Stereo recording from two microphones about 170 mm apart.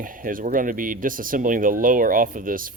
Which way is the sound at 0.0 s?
55° right (ahead or behind).